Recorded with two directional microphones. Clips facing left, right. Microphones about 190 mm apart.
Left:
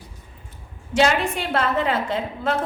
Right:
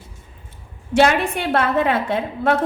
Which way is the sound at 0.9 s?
60° right (ahead or behind).